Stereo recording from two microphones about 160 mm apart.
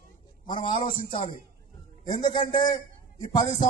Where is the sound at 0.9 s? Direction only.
55° left (ahead or behind).